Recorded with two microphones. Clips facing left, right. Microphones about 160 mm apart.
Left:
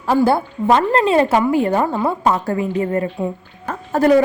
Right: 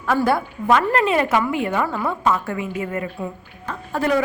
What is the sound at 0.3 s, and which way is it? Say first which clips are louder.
Speech: left 3 dB; 30° left (ahead or behind).